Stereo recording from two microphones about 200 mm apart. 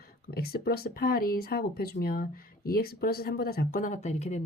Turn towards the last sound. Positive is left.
turn(degrees=35)  # may be behind; listen again after turning